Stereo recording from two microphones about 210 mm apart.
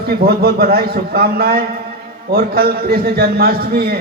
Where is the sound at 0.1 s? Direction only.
45° right (ahead or behind).